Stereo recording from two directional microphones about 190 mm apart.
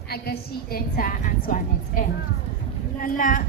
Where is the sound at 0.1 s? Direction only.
55° left (ahead or behind).